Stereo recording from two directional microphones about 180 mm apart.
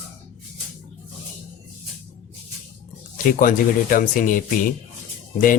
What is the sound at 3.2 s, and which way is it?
Speech, 50° left (ahead or behind).